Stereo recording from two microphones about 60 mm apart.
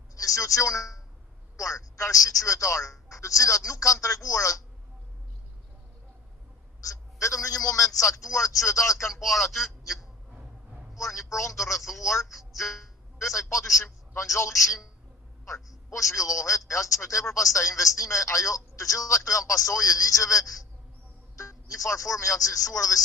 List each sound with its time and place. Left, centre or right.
0.2 s a man's voice: left
6.8 s a man's voice: left
10.9 s a man's voice: left
13.1 s a man's voice: left
13.8 s a man's voice: left
14.3 s a man's voice: left